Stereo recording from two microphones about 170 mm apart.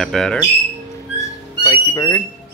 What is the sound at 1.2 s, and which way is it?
Music, 20° left (ahead or behind).